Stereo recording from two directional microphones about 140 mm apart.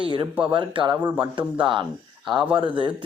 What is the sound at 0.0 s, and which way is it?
Speech, 35° right (ahead or behind).